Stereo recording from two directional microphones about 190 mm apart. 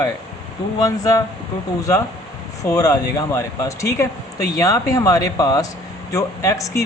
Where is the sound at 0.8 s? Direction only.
20° left (ahead or behind).